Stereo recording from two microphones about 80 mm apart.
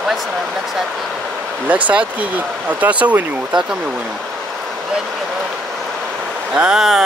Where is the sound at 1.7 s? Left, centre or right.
Centre.